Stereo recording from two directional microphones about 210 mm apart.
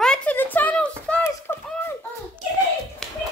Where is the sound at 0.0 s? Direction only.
5° left (ahead or behind).